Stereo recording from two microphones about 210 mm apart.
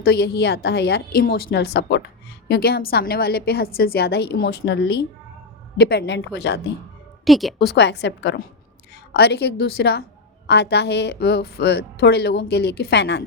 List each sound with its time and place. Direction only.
0.0 s a woman's voice: 50° left (ahead or behind)
7.3 s a woman's voice: centre (ahead or behind)
7.8 s a woman's voice: 55° left (ahead or behind)